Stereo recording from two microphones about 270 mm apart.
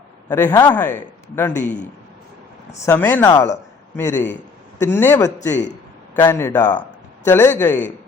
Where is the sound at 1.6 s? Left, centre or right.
Left.